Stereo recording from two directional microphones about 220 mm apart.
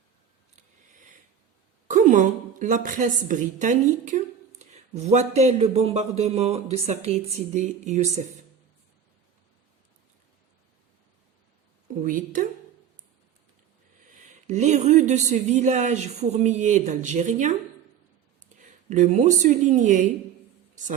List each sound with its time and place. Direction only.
1.9 s a man's voice: 35° right (ahead or behind)
12.0 s speech: 35° right (ahead or behind)
14.4 s speech: 30° right (ahead or behind)
18.6 s speech: 35° right (ahead or behind)